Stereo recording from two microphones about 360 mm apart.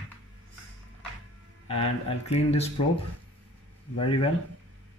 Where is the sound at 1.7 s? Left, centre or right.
Centre.